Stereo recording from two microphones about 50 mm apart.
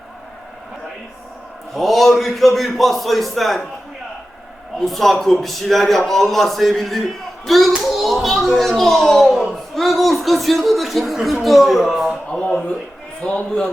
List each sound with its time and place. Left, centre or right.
1.7 s a man's voice: centre
4.8 s a man's voice: centre
7.4 s hands: centre
7.9 s a child's voice: centre
12.3 s a sound: left
13.2 s a man's voice: left